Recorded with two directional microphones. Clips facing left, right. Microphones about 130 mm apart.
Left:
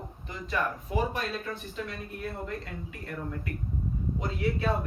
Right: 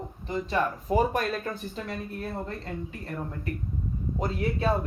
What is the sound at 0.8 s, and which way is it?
Speech, 50° right (ahead or behind).